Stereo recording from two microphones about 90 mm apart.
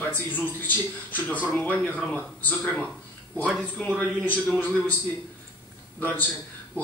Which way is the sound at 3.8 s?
10° left (ahead or behind).